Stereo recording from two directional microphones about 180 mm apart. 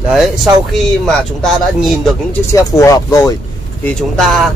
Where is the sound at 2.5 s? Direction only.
20° left (ahead or behind).